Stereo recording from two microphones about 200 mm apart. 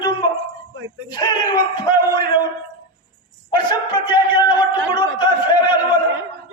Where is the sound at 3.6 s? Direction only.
25° left (ahead or behind).